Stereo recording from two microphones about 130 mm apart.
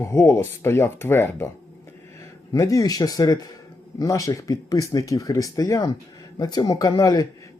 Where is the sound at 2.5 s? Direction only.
25° left (ahead or behind).